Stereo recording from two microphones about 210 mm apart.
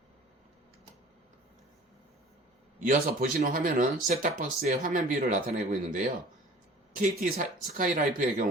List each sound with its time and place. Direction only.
2.7 s speech: 40° right (ahead or behind)